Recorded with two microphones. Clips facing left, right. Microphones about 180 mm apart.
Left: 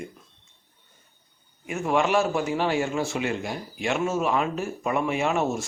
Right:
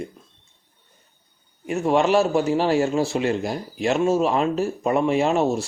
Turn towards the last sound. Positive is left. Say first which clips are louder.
# right 5 dB
turn(degrees=-35)  # may be behind; listen again after turning